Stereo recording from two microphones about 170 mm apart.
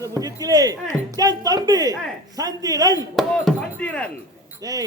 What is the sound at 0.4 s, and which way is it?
Speech, 20° right (ahead or behind).